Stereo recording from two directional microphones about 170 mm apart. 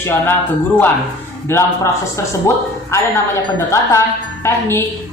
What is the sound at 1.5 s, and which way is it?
A man's voice, 15° left (ahead or behind).